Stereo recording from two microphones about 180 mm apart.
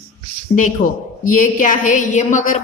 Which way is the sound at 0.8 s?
45° left (ahead or behind).